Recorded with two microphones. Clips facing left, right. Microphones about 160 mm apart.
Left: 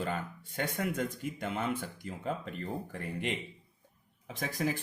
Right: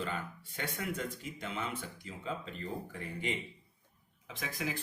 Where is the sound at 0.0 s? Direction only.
45° left (ahead or behind); by 3.3 s 60° left (ahead or behind).